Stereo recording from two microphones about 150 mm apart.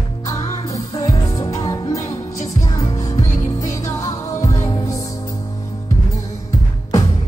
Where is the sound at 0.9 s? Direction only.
20° left (ahead or behind).